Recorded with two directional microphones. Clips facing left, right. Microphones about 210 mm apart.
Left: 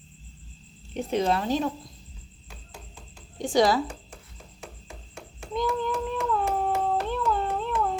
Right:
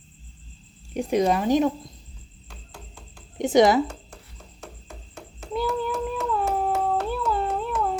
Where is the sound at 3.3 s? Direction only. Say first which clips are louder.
Right 4 dB; 20° right (ahead or behind).